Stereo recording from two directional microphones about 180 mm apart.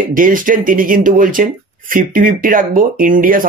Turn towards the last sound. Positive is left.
turn(degrees=-50)  # may be behind; listen again after turning